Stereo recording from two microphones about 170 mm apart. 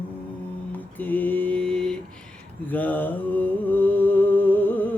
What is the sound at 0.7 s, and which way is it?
Mantra, 10° left (ahead or behind).